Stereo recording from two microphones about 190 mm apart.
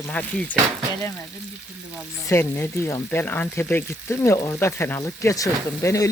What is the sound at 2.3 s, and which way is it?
Speech, 15° left (ahead or behind).